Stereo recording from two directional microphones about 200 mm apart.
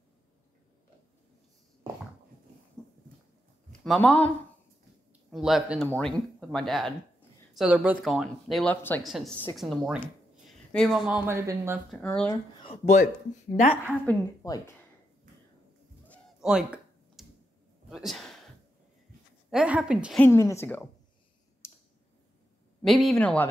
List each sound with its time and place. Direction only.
3.8 s speech: 5° left (ahead or behind)
5.3 s speech: centre (ahead or behind)
11.9 s speech: 5° left (ahead or behind)
12.6 s a man's voice: 35° left (ahead or behind)
13.8 s a woman's voice: 15° left (ahead or behind)
16.1 s a sound: 5° right (ahead or behind)
19.5 s speech: 5° right (ahead or behind)
20.2 s a woman's voice: 15° left (ahead or behind)
21.6 s tick: 15° left (ahead or behind)
22.8 s speech: centre (ahead or behind)